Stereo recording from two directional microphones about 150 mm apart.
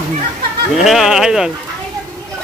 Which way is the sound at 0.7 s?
Centre (ahead or behind).